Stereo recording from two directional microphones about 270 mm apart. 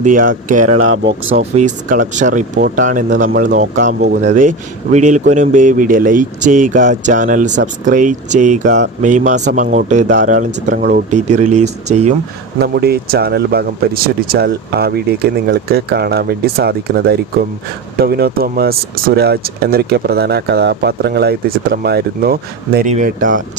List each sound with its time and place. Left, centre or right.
0.0 s speech: right
0.7 s speech: right
1.4 s speech: right
12.5 s speech: right